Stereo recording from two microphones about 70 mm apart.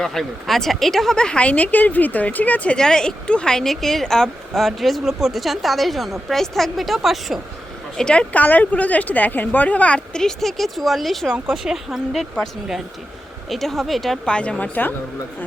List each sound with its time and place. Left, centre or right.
0.0 s speech: centre; by 2.7 s left
2.7 s speech: centre
7.9 s speech: centre
13.5 s speech: centre
14.3 s speech: centre